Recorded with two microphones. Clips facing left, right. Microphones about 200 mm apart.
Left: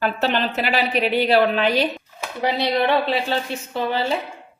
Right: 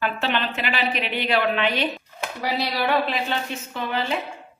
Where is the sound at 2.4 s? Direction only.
25° left (ahead or behind).